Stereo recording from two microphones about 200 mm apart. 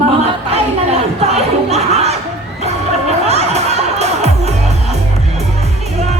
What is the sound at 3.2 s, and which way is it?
Music, 35° right (ahead or behind).